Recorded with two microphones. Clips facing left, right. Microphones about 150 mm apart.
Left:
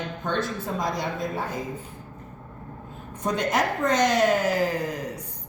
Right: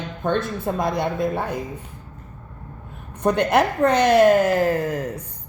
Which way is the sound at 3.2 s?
60° right (ahead or behind).